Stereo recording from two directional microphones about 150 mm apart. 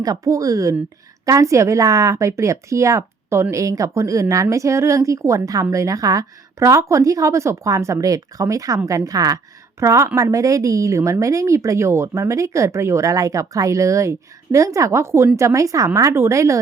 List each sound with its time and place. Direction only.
0.0 s a woman's voice: 25° right (ahead or behind)